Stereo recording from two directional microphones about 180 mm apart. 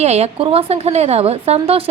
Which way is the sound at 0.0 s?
35° right (ahead or behind).